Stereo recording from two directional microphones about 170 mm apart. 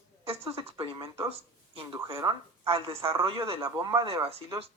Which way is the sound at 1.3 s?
30° right (ahead or behind).